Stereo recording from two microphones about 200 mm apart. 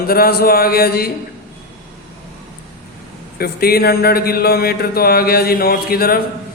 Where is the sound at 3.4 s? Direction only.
50° left (ahead or behind).